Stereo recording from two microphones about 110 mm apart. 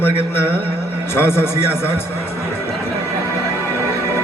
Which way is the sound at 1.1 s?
20° left (ahead or behind).